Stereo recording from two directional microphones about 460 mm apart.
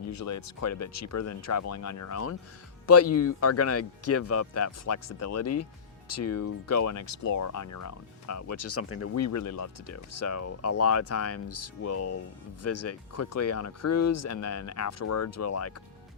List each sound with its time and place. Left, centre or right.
0.1 s speech: left